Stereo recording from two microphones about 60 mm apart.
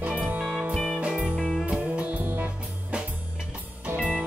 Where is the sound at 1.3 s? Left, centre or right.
Centre.